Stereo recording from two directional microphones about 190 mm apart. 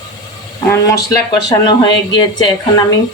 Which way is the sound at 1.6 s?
20° left (ahead or behind).